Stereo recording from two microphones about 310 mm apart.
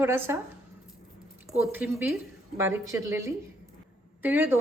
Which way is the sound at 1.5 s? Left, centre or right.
Centre.